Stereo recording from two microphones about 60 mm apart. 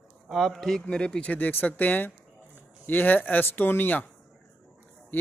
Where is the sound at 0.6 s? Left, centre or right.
Centre; by 4.0 s left.